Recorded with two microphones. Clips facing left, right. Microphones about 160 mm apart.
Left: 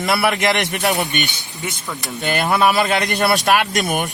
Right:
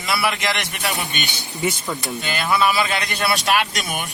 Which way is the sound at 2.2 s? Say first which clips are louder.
Left 4 dB; 50° left (ahead or behind).